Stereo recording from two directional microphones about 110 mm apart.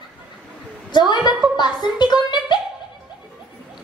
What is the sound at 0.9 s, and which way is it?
A child's voice, 40° left (ahead or behind).